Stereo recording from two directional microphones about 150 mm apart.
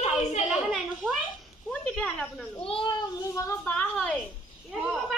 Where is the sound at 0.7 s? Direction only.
Centre (ahead or behind).